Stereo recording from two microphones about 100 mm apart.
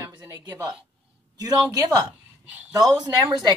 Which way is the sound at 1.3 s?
35° right (ahead or behind).